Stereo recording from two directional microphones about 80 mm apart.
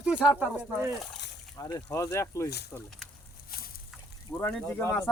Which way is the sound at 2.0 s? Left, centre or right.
Left.